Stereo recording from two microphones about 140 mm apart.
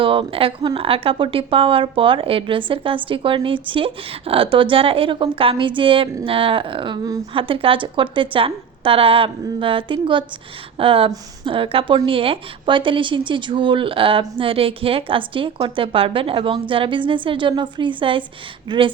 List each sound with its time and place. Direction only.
0.0 s speech: 40° right (ahead or behind)